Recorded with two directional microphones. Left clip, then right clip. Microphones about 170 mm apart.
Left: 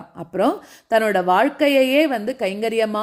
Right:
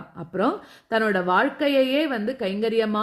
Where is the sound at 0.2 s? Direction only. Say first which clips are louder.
Left 4 dB; 20° left (ahead or behind).